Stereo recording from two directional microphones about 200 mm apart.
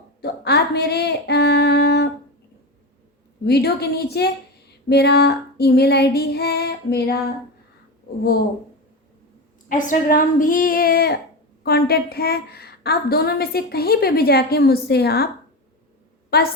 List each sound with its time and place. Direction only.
0.2 s female singing: 55° left (ahead or behind)
3.4 s a woman's voice: 55° left (ahead or behind)
9.6 s a woman's voice: 40° left (ahead or behind)
16.3 s a woman's voice: 50° left (ahead or behind)